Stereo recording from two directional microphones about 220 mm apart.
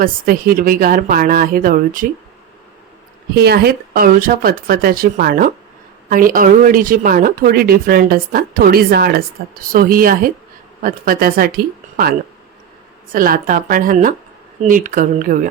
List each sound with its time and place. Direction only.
0.0 s a woman's voice: 40° right (ahead or behind)
3.3 s a woman's voice: 45° right (ahead or behind)
13.1 s a woman's voice: 40° right (ahead or behind)